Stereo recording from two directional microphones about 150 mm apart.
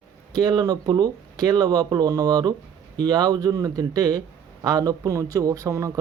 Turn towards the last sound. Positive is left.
turn(degrees=-20)  # may be behind; listen again after turning